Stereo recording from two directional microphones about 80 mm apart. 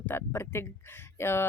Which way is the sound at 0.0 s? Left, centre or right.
Left.